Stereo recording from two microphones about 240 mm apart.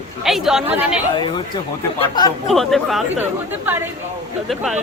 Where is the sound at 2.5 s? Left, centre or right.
Centre.